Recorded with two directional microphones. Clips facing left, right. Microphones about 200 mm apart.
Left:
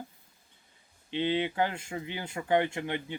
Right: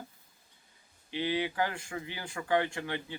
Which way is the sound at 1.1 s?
20° left (ahead or behind).